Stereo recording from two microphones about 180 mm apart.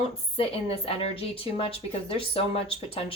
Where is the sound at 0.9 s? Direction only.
30° left (ahead or behind).